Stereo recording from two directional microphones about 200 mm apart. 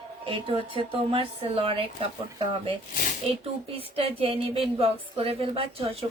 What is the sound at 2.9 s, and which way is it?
Speech, 45° left (ahead or behind).